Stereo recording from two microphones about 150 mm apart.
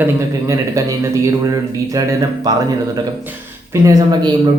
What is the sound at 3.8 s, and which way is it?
Speech, 20° right (ahead or behind).